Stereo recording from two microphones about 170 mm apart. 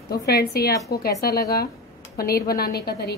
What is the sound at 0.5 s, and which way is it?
A woman's voice, 65° left (ahead or behind).